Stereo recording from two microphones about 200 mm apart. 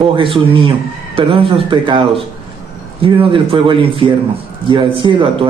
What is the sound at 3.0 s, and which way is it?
A man's voice, 25° right (ahead or behind).